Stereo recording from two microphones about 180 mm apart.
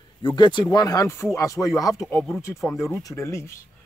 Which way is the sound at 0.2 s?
25° left (ahead or behind).